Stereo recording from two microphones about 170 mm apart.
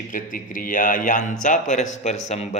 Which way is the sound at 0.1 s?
55° left (ahead or behind).